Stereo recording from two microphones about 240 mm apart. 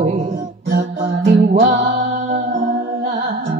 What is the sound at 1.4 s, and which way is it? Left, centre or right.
Music, right.